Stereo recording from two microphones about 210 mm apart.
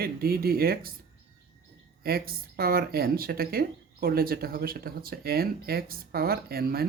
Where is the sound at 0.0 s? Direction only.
45° right (ahead or behind).